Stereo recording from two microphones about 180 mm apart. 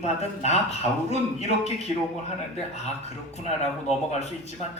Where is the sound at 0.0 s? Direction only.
35° left (ahead or behind).